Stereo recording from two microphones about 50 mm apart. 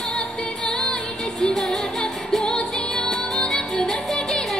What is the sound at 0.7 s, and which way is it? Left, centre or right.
Music, centre.